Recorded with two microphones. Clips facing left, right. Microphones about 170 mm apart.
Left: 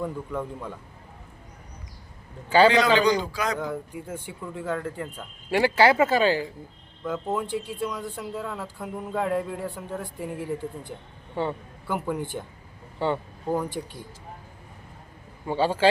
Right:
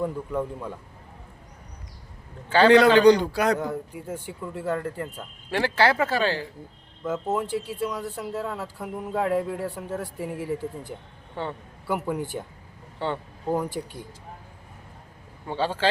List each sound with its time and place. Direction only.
0.0 s speech: 5° right (ahead or behind)
2.5 s speech: 10° left (ahead or behind)
2.7 s a man's voice: 60° right (ahead or behind)
3.6 s speech: 5° right (ahead or behind)
5.5 s speech: 10° left (ahead or behind)
7.0 s a man's voice: 5° right (ahead or behind)
13.8 s speech: centre (ahead or behind)
15.4 s speech: 10° left (ahead or behind)